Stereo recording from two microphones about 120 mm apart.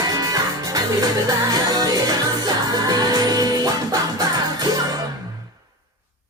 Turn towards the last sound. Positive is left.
turn(degrees=-30)  # may be behind; listen again after turning